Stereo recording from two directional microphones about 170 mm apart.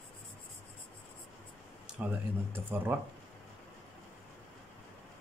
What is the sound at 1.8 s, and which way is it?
Speech, 10° right (ahead or behind).